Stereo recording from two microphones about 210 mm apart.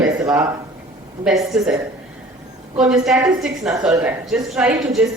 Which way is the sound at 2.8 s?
Centre (ahead or behind).